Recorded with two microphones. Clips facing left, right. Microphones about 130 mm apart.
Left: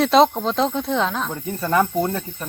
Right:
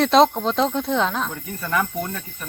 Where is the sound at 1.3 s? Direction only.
30° left (ahead or behind).